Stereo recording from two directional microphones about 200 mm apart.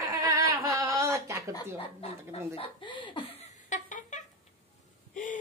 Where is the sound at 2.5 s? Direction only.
25° left (ahead or behind).